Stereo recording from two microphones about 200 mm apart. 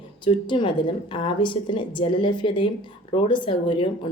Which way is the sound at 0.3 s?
25° left (ahead or behind).